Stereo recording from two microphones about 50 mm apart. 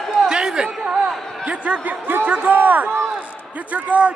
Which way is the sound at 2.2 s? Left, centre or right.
Right.